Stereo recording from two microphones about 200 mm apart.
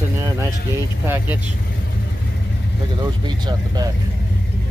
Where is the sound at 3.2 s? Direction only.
20° right (ahead or behind).